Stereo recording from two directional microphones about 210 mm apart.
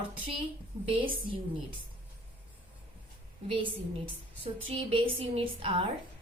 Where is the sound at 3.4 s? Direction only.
25° right (ahead or behind).